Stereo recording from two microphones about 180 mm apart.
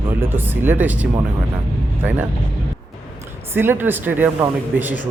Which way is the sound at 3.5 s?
10° right (ahead or behind).